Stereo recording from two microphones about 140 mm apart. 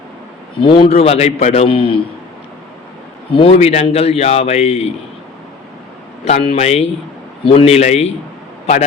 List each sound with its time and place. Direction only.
0.6 s a man's voice: 40° left (ahead or behind)
3.3 s a man's voice: 45° left (ahead or behind)
6.2 s a man's voice: 45° left (ahead or behind)